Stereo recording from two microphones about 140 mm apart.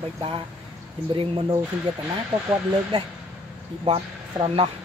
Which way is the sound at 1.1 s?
40° right (ahead or behind).